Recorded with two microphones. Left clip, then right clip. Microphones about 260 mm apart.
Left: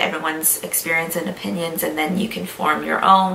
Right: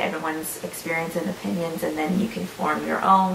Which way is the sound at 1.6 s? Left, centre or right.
Centre.